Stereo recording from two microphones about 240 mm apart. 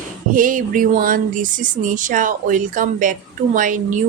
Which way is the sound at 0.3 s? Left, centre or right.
Right.